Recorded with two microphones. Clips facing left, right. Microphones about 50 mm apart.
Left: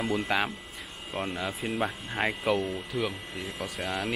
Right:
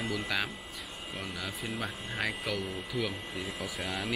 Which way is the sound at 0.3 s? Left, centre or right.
Left.